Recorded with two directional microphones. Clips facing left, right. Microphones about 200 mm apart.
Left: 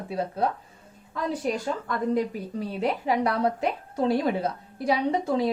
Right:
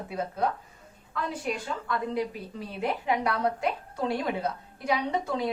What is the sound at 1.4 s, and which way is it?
A woman's voice, 40° left (ahead or behind).